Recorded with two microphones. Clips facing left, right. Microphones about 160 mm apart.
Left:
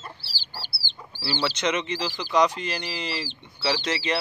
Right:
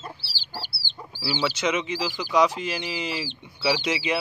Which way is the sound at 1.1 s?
10° right (ahead or behind).